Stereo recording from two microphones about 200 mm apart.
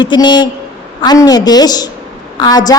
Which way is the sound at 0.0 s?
20° left (ahead or behind).